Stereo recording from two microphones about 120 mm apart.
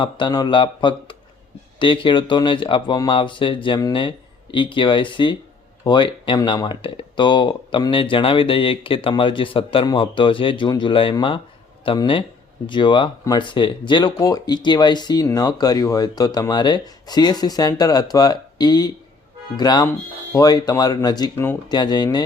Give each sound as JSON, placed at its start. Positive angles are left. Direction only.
{"t": 0.0, "sound": "speech", "side_deg": 40}
{"t": 14.2, "sound": "speech", "side_deg": 30}
{"t": 21.3, "sound": "speech", "side_deg": 20}
{"t": 21.7, "sound": "speech", "side_deg": 35}